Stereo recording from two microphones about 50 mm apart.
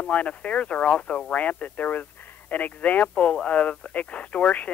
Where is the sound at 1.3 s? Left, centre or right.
Left.